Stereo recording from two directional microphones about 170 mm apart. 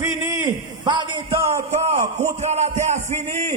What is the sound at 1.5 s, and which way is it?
A man's voice, 40° right (ahead or behind).